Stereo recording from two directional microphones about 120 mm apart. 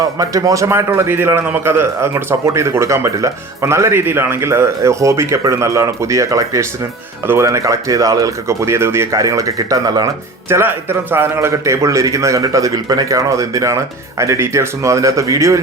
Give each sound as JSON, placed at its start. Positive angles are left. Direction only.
{"t": 0.2, "sound": "a man's voice", "side_deg": -30}
{"t": 10.5, "sound": "a man's voice", "side_deg": -20}